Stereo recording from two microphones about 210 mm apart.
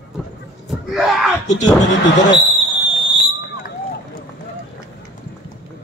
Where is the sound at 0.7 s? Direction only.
Centre (ahead or behind).